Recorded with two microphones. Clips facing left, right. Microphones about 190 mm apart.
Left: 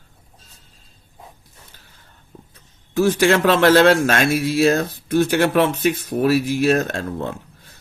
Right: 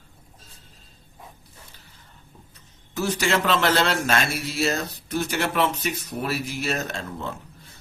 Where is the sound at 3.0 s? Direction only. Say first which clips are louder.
Left 7 dB; 55° left (ahead or behind).